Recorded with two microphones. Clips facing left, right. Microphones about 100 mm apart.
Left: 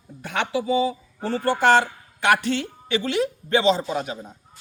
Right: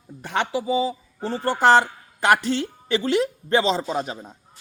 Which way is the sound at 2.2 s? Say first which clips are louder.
Right 1 dB; 35° right (ahead or behind).